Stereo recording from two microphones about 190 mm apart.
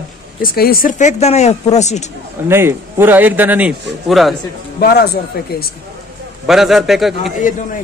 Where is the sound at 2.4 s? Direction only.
10° right (ahead or behind).